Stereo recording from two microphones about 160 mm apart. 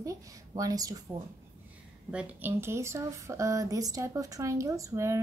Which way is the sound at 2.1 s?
10° right (ahead or behind).